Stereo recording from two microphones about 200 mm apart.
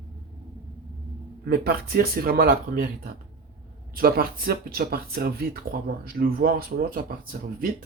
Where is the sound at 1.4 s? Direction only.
50° right (ahead or behind).